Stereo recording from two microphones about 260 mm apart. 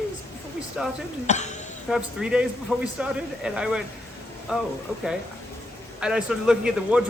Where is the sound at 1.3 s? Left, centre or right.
Left.